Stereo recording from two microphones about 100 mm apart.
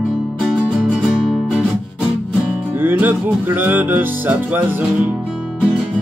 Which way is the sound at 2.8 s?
20° right (ahead or behind).